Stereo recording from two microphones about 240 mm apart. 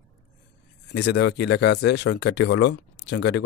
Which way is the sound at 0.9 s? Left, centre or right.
Left.